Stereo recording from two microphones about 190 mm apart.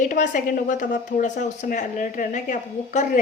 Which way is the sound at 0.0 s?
40° left (ahead or behind).